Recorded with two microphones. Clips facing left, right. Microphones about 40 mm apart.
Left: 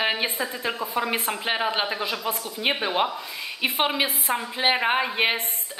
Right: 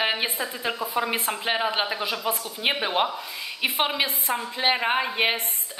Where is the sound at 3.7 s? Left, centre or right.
Centre.